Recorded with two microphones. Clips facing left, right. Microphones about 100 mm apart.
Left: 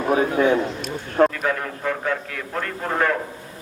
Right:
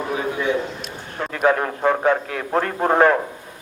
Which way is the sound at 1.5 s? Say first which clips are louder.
Right 6 dB; 40° right (ahead or behind).